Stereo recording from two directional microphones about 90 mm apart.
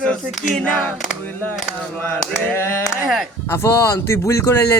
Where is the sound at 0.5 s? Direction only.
20° left (ahead or behind).